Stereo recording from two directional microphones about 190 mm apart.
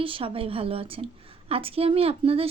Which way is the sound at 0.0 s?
30° right (ahead or behind).